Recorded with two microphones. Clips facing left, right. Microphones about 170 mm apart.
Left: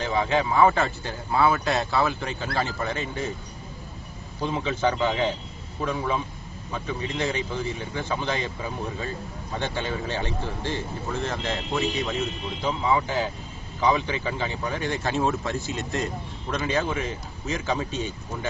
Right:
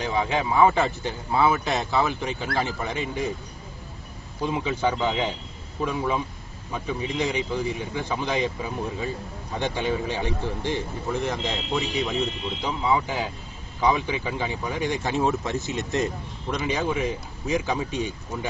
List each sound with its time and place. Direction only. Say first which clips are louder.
0.0 s speech: left 1 dB; 15° right (ahead or behind)
4.4 s speech: even; 15° right (ahead or behind)
9.6 s speech: right 4 dB; 15° right (ahead or behind)